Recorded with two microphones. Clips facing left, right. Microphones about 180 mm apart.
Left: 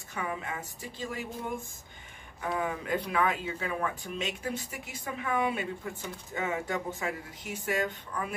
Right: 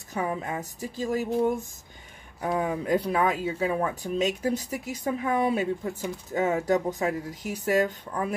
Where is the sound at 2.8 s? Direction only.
40° right (ahead or behind).